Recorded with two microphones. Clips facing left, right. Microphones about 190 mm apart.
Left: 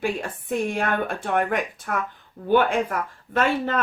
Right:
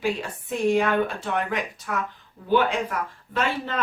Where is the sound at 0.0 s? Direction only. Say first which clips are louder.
Even; 55° left (ahead or behind).